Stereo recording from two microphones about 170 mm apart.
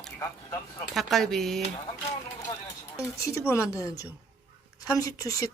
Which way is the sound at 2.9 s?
15° left (ahead or behind).